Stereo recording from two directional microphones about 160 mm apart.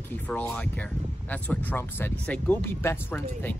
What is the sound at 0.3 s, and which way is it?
Speech, 10° left (ahead or behind).